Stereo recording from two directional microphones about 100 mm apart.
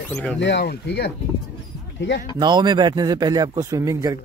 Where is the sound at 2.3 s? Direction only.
45° right (ahead or behind).